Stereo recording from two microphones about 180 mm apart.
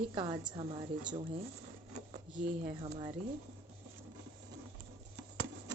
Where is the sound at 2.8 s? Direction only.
25° right (ahead or behind).